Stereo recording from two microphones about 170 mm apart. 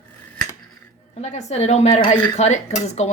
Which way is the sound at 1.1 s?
40° left (ahead or behind).